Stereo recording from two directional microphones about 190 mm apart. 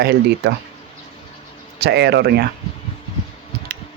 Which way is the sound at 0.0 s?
60° right (ahead or behind).